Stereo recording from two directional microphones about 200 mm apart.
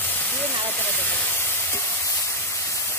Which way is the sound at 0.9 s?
10° left (ahead or behind).